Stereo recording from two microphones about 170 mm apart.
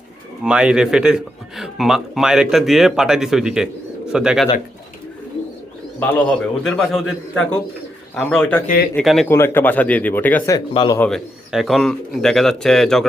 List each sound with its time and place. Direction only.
0.4 s a man's voice: 5° right (ahead or behind)
6.0 s a man's voice: 5° left (ahead or behind)
8.1 s a man's voice: 5° left (ahead or behind)
8.6 s speech: 60° left (ahead or behind)
9.0 s a man's voice: 5° left (ahead or behind)
9.3 s speech: 15° left (ahead or behind)
10.5 s speech: 20° left (ahead or behind)
11.0 s a man's voice: centre (ahead or behind)